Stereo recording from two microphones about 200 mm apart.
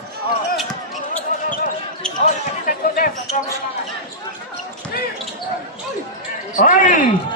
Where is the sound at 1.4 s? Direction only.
40° left (ahead or behind).